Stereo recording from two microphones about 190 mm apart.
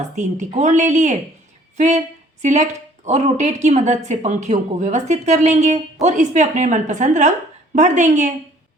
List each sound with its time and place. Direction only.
0.2 s speech: 40° right (ahead or behind)